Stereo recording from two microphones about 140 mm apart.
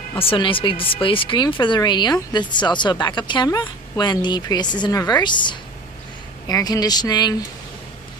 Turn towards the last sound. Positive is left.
turn(degrees=30)  # may be behind; listen again after turning